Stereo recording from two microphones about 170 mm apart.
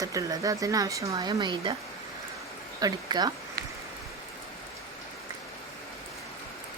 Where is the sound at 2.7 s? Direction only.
25° right (ahead or behind).